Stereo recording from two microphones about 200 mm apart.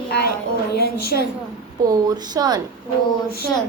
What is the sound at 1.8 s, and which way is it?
Speech, 20° right (ahead or behind).